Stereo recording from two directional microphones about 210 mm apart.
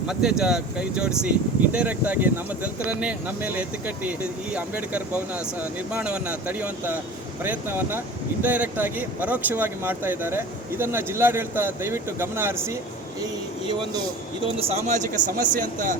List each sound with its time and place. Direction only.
0.1 s speech: 5° right (ahead or behind)
14.7 s a man's voice: 35° right (ahead or behind)